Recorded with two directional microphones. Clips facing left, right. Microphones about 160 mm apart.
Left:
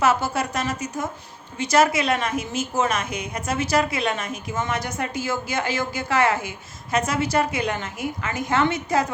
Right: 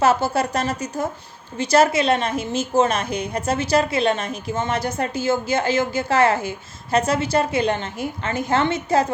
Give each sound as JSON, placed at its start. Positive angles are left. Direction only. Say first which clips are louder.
{"t": 0.0, "sound": "a woman's voice", "louder": "right 3 dB", "side_deg": -30}